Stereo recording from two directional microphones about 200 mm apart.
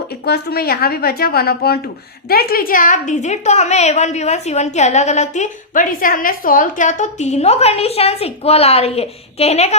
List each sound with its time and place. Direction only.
0.3 s a woman's voice: 50° left (ahead or behind); by 9.7 s 30° left (ahead or behind)